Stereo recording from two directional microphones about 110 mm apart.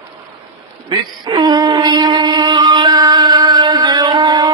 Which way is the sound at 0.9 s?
45° right (ahead or behind).